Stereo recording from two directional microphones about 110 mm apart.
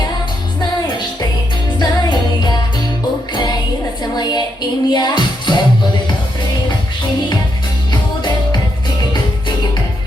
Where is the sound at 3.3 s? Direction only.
40° left (ahead or behind).